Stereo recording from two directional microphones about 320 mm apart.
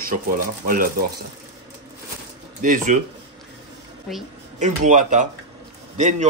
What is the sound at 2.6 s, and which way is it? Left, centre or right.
Speech, right.